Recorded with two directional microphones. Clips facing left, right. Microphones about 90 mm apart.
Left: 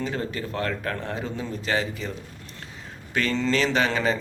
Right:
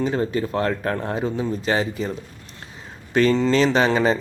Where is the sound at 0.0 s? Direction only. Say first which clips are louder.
Right 7 dB; 25° right (ahead or behind).